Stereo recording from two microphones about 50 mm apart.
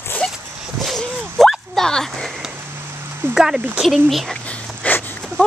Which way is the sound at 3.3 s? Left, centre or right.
Centre.